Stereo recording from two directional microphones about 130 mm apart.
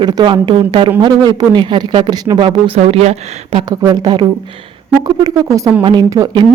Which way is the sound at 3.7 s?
30° right (ahead or behind).